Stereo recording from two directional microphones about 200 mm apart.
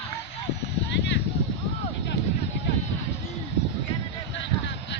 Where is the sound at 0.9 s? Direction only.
60° left (ahead or behind).